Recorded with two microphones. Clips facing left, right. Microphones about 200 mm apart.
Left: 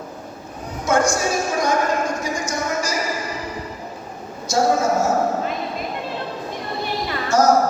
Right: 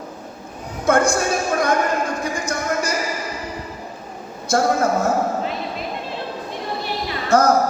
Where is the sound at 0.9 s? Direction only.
55° right (ahead or behind).